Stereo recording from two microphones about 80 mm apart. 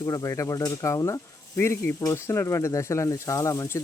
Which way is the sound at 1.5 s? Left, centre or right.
Left.